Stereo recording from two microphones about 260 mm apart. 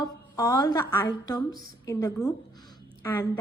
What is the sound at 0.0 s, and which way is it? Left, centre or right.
A woman's voice, centre.